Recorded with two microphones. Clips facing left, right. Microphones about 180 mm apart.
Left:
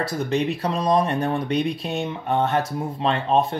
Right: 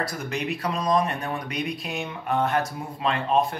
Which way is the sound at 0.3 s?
30° left (ahead or behind).